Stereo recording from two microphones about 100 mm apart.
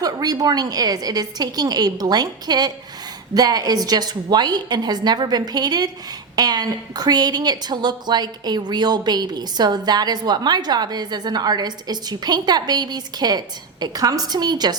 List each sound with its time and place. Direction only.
0.0 s a woman's voice: 40° right (ahead or behind)